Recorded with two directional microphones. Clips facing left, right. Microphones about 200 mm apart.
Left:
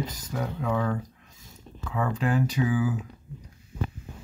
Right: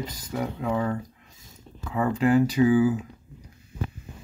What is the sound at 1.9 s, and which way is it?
Speech, 10° right (ahead or behind).